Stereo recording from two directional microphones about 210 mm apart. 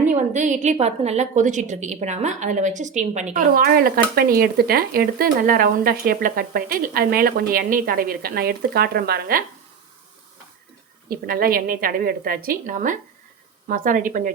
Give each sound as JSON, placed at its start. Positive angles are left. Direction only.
{"t": 0.1, "sound": "a woman's voice", "side_deg": -35}
{"t": 11.1, "sound": "a woman's voice", "side_deg": -45}